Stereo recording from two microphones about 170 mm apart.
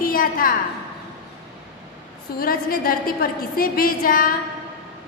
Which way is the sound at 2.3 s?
60° left (ahead or behind).